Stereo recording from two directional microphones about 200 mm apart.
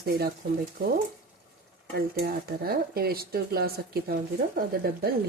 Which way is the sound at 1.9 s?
50° right (ahead or behind).